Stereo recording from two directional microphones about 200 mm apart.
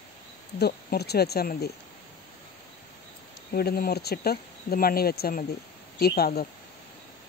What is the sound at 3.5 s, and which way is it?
Speech, 50° left (ahead or behind).